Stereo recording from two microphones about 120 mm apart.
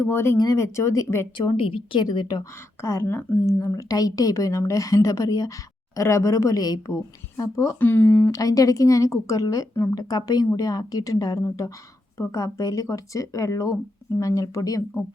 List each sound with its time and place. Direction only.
0.0 s speech: 20° left (ahead or behind)
1.5 s speech: 50° left (ahead or behind)
2.8 s speech: 25° left (ahead or behind)